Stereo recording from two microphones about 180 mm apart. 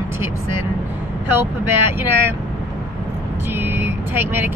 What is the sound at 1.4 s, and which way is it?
Speech, 15° right (ahead or behind).